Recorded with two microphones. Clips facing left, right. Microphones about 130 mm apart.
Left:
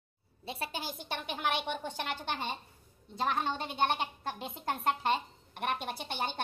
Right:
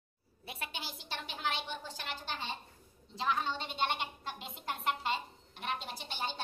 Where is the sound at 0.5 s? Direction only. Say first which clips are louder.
Left 5 dB; 35° left (ahead or behind).